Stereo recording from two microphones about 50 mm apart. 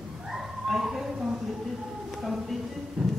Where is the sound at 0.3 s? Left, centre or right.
Centre.